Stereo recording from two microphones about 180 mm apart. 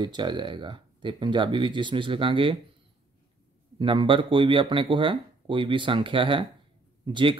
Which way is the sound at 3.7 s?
25° right (ahead or behind).